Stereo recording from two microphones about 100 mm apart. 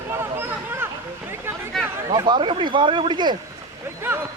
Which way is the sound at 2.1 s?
45° right (ahead or behind).